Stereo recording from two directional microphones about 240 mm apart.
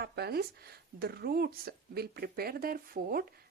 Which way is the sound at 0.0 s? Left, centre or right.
Right.